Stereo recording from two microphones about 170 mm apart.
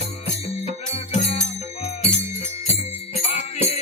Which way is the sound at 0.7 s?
35° left (ahead or behind).